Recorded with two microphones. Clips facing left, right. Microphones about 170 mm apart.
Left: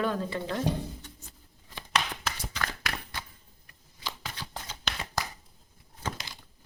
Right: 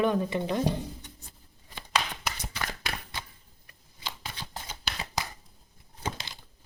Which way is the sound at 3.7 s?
25° right (ahead or behind).